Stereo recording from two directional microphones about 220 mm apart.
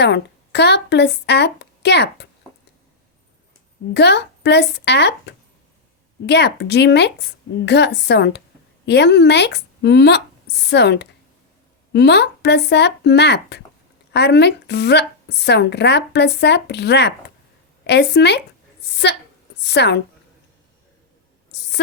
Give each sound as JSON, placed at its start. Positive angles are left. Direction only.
{"t": 0.0, "sound": "a woman's voice", "side_deg": 50}
{"t": 3.9, "sound": "a woman's voice", "side_deg": 50}